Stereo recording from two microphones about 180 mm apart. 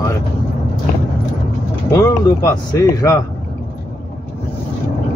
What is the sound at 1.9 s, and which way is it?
Speech, 15° left (ahead or behind).